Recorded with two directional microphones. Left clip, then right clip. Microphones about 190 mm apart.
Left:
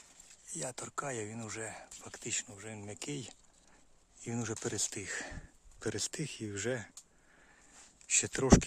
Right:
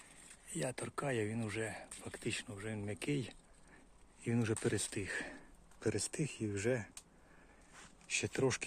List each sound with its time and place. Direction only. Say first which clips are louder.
0.5 s speech: left 1 dB; 5° left (ahead or behind)
8.0 s speech: left 3 dB; 30° left (ahead or behind)